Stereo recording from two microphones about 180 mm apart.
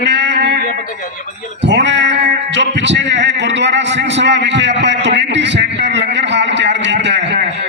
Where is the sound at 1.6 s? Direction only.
75° right (ahead or behind).